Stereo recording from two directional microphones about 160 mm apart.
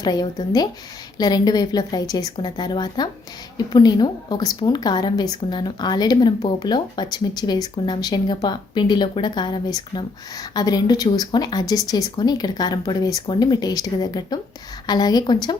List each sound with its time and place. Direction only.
0.0 s a woman's voice: 25° left (ahead or behind)